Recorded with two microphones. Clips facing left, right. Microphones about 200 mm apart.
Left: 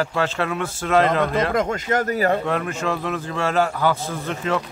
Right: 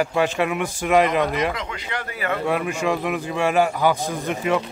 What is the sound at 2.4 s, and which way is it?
A man's voice, 10° right (ahead or behind).